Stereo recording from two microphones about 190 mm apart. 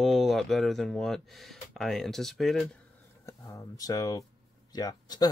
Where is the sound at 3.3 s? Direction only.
15° left (ahead or behind).